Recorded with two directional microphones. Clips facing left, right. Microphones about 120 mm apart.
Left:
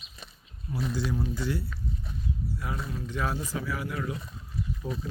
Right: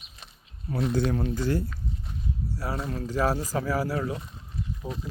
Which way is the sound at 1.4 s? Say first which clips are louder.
Right 5 dB; 45° right (ahead or behind).